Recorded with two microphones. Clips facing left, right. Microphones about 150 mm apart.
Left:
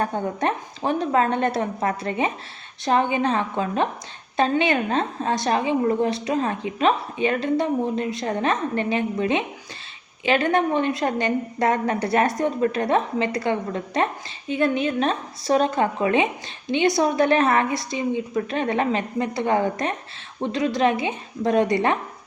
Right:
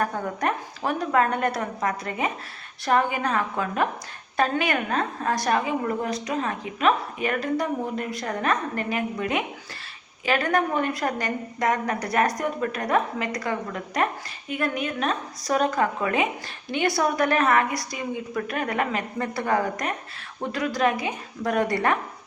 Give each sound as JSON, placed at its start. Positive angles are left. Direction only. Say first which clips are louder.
{"t": 0.0, "sound": "a woman's voice", "louder": "left 2 dB", "side_deg": 25}